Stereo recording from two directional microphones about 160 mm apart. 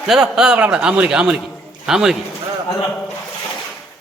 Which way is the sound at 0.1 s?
5° right (ahead or behind).